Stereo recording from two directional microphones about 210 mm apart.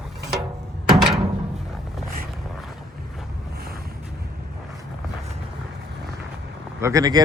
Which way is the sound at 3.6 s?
45° right (ahead or behind).